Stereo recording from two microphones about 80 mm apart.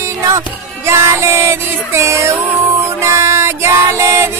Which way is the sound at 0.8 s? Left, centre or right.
Right.